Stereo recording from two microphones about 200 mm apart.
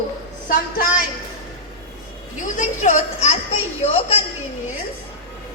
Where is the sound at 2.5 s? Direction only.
35° left (ahead or behind).